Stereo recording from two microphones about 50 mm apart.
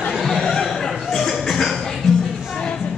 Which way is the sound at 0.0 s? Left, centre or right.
Centre.